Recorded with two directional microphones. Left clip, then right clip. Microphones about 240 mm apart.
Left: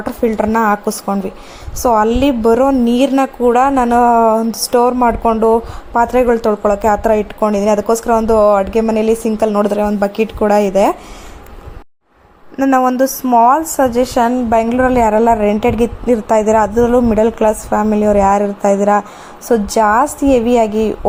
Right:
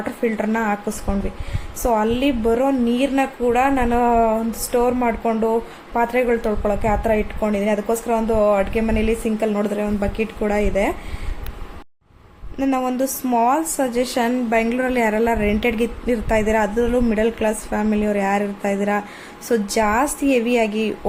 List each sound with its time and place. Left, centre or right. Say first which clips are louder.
0.0 s a woman's voice: left 7 dB; left
12.7 s a woman's voice: left 11 dB; centre